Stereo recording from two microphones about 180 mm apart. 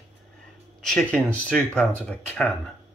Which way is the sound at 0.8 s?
Centre (ahead or behind).